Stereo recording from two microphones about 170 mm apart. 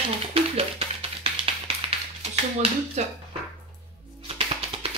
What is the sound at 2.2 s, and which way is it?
Speech, 40° right (ahead or behind).